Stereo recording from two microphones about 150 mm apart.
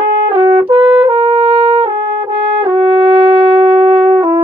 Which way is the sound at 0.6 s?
35° right (ahead or behind).